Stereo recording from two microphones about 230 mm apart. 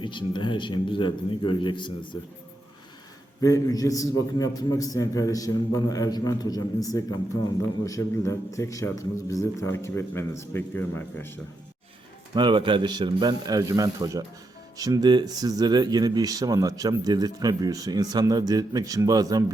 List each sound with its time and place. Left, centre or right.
0.0 s a man's voice: left
3.4 s a man's voice: centre
12.3 s a man's voice: centre